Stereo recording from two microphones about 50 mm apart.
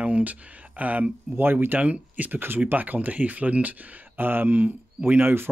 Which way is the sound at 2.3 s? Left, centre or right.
Right.